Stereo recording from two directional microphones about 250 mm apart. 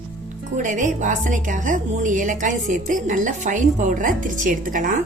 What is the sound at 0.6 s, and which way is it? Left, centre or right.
A woman's voice, right.